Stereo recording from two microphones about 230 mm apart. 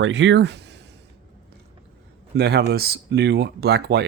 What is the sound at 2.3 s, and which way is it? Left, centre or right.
Speech, right.